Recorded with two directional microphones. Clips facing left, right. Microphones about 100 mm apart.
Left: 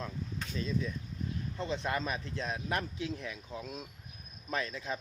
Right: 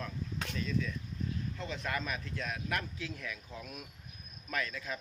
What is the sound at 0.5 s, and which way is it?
A man's voice, 25° left (ahead or behind).